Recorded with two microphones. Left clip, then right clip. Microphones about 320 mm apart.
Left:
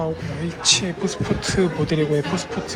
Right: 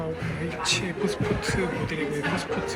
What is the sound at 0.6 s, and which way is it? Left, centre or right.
Speech, centre.